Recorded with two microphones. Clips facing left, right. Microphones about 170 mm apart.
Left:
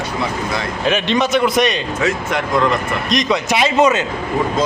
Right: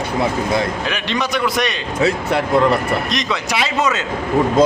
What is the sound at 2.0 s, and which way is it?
Speech, 35° right (ahead or behind).